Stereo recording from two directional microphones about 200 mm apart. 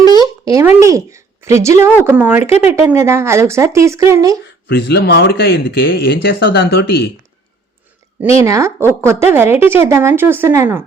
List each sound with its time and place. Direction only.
0.2 s a woman's voice: 15° right (ahead or behind)
4.7 s speech: 55° left (ahead or behind)
8.4 s speech: 15° right (ahead or behind)